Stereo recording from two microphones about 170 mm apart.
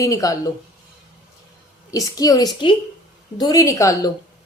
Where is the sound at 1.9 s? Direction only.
20° left (ahead or behind).